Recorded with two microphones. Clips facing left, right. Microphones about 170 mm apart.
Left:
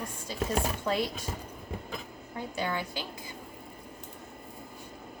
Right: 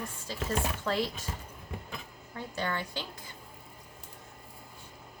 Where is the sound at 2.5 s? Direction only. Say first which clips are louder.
Left 1 dB; 10° left (ahead or behind).